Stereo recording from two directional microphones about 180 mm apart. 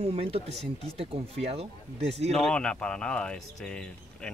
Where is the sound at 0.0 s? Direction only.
35° right (ahead or behind).